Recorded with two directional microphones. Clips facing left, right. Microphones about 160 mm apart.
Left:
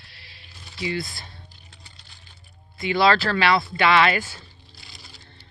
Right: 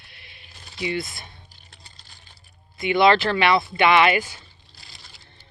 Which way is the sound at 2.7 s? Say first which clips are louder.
Right 2 dB; 20° right (ahead or behind).